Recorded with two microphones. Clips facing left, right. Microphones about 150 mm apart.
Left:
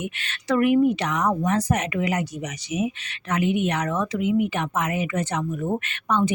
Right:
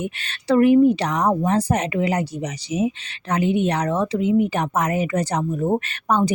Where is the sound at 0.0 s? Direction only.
35° right (ahead or behind).